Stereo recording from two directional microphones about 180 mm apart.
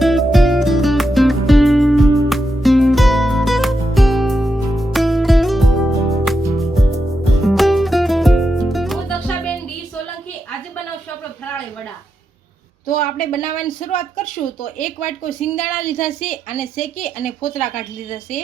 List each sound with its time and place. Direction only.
0.0 s music: centre (ahead or behind)
7.4 s music: centre (ahead or behind)
12.9 s a woman's voice: 55° left (ahead or behind)